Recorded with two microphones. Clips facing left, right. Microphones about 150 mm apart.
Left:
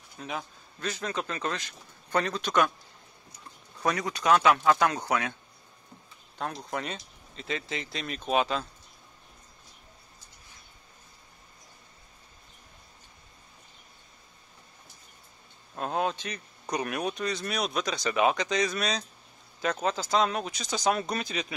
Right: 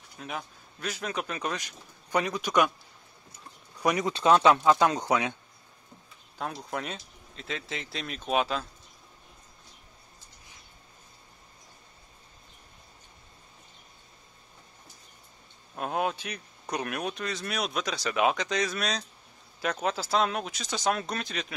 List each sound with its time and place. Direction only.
0.2 s a man's voice: centre (ahead or behind)
3.8 s speech: 20° right (ahead or behind)
6.3 s speech: 5° right (ahead or behind)
15.7 s speech: 5° right (ahead or behind)